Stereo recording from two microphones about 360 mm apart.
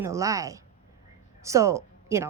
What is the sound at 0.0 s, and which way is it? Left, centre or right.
Speech, centre.